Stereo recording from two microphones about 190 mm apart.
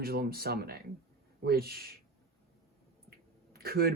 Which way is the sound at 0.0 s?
55° right (ahead or behind).